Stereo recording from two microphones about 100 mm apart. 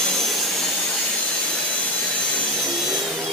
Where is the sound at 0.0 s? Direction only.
Centre (ahead or behind).